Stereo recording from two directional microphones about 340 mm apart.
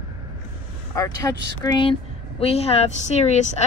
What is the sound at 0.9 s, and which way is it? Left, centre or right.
A woman's voice, centre.